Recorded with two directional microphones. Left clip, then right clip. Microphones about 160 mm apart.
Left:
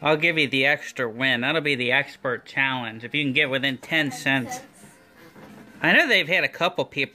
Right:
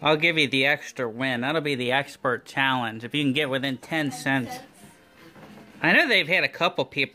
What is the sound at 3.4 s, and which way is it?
Speech, 10° right (ahead or behind).